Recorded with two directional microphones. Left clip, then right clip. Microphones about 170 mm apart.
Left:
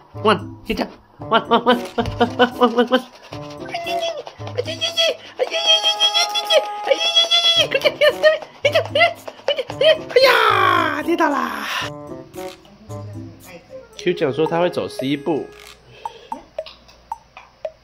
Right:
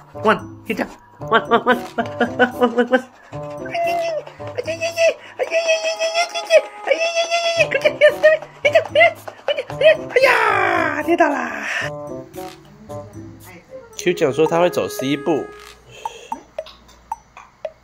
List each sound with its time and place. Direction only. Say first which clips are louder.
0.2 s speech: even; 20° left (ahead or behind)
3.7 s music: right 3 dB; 30° left (ahead or behind)
4.6 s giggle: right 1 dB; 35° left (ahead or behind)
6.5 s music: right 3 dB; 35° left (ahead or behind)
10.6 s a sound: left 2 dB; 20° left (ahead or behind)
11.3 s speech: left 1 dB; 35° left (ahead or behind)
13.9 s speech: right 2 dB; 5° left (ahead or behind)
16.0 s music: right 2 dB; 5° left (ahead or behind)
17.1 s a sound: right 2 dB; 5° left (ahead or behind)